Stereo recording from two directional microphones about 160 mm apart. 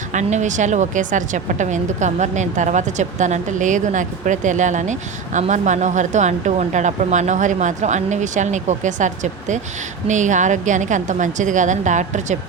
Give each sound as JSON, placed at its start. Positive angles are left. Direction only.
{"t": 0.1, "sound": "a woman's voice", "side_deg": -50}